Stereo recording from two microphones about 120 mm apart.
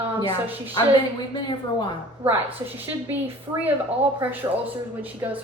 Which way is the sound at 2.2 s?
15° right (ahead or behind).